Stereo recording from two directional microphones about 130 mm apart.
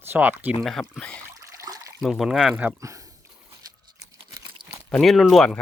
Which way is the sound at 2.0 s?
Centre (ahead or behind).